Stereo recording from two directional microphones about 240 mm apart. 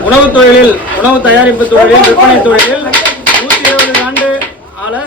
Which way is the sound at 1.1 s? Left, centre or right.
Centre.